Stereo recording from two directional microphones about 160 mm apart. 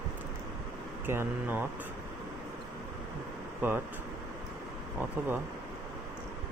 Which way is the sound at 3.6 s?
10° right (ahead or behind).